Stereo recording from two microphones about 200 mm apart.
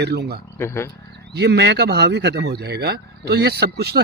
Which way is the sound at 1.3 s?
55° right (ahead or behind).